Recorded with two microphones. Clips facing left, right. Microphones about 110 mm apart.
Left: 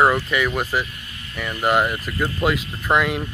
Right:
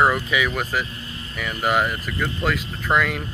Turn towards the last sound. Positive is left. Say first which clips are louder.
# left 2 dB
turn(degrees=5)  # may be behind; listen again after turning